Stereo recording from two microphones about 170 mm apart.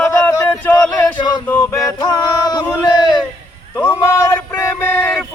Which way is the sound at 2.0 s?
25° left (ahead or behind).